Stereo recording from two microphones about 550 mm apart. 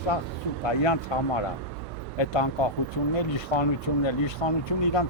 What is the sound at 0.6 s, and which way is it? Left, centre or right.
Speech, left.